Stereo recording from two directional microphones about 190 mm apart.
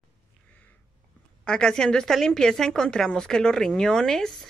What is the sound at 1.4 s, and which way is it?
A woman's voice, 5° left (ahead or behind).